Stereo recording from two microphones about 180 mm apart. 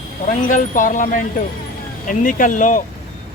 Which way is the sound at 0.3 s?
45° left (ahead or behind).